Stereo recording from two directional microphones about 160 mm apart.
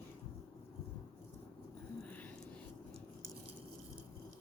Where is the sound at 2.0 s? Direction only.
10° left (ahead or behind).